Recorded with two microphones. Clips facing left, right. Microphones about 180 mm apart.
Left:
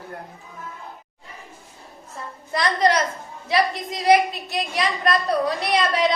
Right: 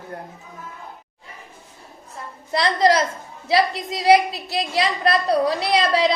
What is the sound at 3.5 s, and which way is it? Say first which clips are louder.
A woman's voice: right 2 dB; 30° right (ahead or behind).